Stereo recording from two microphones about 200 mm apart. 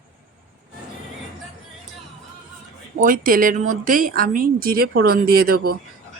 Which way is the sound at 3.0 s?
45° right (ahead or behind).